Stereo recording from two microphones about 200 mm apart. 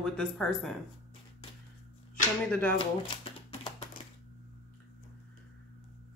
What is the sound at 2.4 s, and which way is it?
Speech, 5° left (ahead or behind).